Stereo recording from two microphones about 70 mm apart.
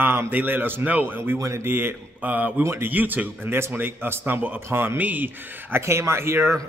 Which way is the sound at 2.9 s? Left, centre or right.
Right.